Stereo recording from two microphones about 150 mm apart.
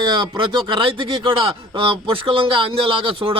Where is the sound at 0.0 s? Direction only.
30° right (ahead or behind).